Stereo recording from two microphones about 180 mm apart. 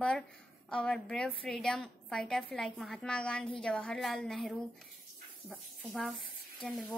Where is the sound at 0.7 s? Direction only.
5° left (ahead or behind).